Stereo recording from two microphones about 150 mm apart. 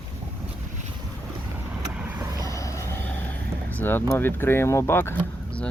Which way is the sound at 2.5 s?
20° left (ahead or behind).